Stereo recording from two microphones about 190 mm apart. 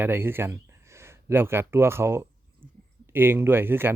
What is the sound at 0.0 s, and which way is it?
Speech, 10° right (ahead or behind).